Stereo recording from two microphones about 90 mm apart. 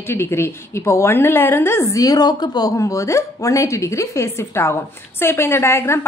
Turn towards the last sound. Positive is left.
turn(degrees=30)  # may be behind; listen again after turning